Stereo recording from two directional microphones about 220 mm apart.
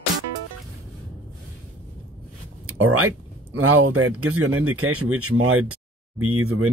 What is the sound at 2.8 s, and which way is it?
Speech, 80° right.